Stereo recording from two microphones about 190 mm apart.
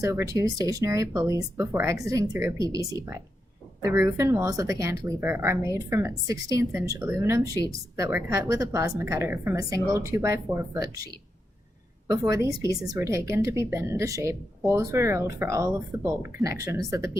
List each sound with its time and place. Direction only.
0.0 s a woman's voice: 15° right (ahead or behind)